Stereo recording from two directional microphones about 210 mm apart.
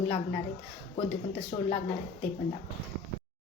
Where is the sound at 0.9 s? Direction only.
30° left (ahead or behind).